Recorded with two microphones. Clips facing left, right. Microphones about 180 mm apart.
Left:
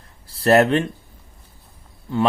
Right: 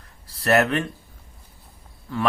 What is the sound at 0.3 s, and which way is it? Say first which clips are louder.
Speech: left 5 dB; 30° left (ahead or behind).